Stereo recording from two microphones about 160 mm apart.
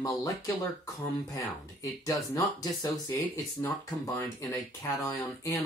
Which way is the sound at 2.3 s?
25° left (ahead or behind).